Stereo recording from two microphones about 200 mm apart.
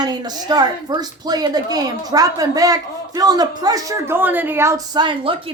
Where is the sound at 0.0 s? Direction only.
20° right (ahead or behind).